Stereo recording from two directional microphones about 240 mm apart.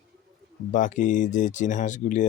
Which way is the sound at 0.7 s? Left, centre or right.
Left.